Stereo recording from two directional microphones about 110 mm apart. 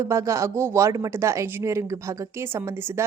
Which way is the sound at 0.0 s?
30° right (ahead or behind).